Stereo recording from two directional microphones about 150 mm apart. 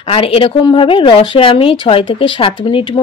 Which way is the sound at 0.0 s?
40° left (ahead or behind).